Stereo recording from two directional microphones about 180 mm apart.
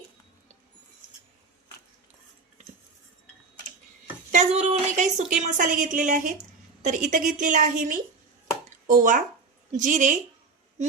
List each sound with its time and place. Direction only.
4.3 s a woman's voice: 45° right (ahead or behind)